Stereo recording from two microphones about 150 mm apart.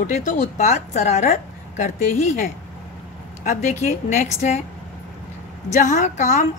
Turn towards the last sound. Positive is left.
turn(degrees=55)  # may be behind; listen again after turning